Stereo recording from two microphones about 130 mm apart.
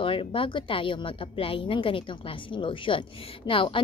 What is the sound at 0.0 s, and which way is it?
A woman's voice, 45° left (ahead or behind).